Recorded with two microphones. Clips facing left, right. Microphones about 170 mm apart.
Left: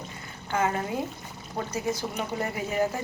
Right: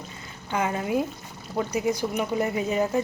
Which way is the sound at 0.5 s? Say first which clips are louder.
Right 2 dB; 20° right (ahead or behind).